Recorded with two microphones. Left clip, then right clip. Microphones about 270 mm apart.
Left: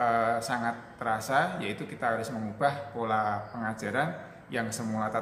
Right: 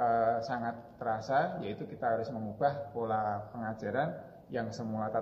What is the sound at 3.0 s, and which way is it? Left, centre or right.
A man's voice, left.